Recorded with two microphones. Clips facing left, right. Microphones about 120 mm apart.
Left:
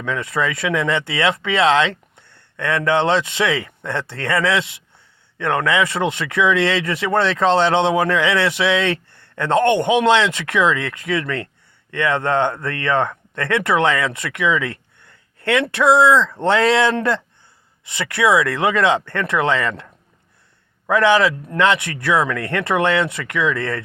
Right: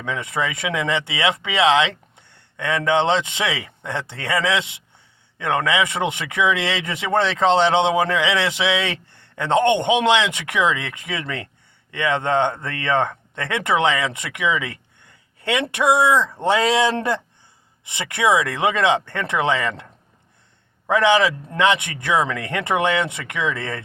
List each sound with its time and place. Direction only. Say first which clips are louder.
0.0 s a man's voice: left 3 dB; 20° right (ahead or behind)